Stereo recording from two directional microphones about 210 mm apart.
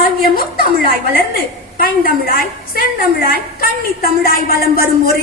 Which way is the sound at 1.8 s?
45° left (ahead or behind).